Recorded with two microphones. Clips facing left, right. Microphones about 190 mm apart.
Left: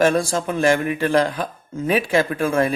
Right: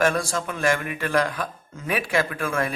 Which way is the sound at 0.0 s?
25° left (ahead or behind).